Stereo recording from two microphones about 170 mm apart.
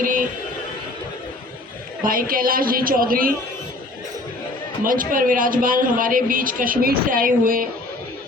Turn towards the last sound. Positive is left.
turn(degrees=-55)  # may be behind; listen again after turning